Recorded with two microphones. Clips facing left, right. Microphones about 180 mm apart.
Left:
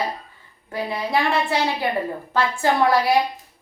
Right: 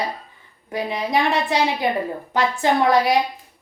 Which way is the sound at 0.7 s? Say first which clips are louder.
Right 1 dB; 20° right (ahead or behind).